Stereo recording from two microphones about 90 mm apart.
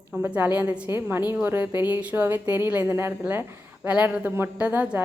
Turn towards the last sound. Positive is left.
turn(degrees=-20)  # may be behind; listen again after turning